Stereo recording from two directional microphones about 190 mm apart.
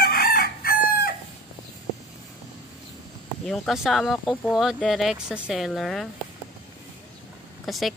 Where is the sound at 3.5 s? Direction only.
Centre (ahead or behind).